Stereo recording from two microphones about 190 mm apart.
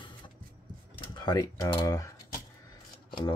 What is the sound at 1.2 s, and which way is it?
Speech, 20° left (ahead or behind).